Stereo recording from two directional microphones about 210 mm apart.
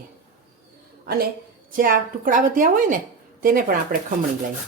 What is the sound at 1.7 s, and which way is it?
Speech, 40° right (ahead or behind).